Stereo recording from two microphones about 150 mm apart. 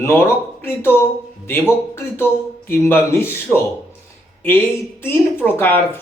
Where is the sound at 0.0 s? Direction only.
15° left (ahead or behind).